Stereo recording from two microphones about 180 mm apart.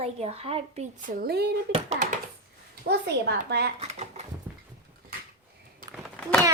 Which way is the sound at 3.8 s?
35° right (ahead or behind).